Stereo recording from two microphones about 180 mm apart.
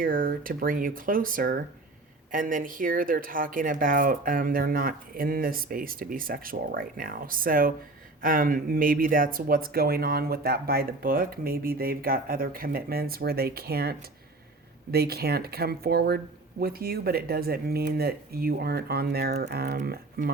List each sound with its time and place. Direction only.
0.0 s speech: 50° right (ahead or behind)